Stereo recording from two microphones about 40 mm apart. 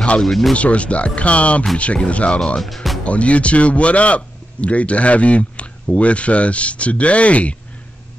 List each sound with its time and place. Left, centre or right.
0.2 s speech: centre
0.6 s speech: left
2.6 s speech: centre
3.0 s speech: left